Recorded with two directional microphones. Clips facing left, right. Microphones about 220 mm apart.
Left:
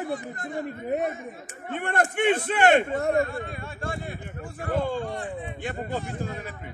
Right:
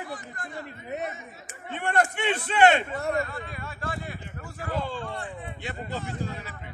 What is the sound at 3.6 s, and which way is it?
Speech, 25° left (ahead or behind).